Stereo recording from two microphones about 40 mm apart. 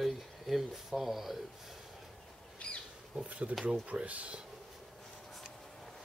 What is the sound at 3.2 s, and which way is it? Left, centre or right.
Speech, right.